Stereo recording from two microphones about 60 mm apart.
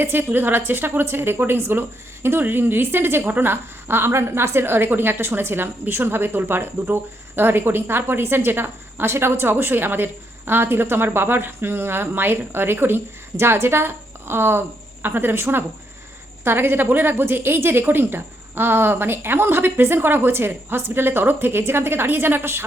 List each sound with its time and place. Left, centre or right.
0.0 s a woman's voice: right